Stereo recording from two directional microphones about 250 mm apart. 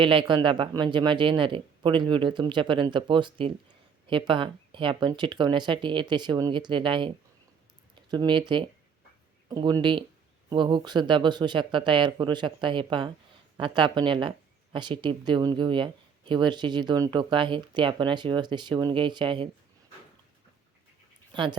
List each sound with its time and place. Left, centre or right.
0.0 s speech: centre
21.3 s speech: centre